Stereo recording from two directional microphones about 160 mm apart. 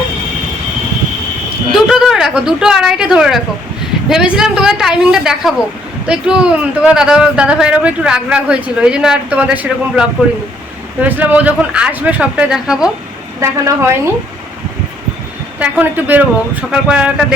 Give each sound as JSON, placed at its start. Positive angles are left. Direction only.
{"t": 1.7, "sound": "a woman's voice", "side_deg": 0}
{"t": 13.4, "sound": "speech", "side_deg": -15}
{"t": 15.5, "sound": "speech", "side_deg": -10}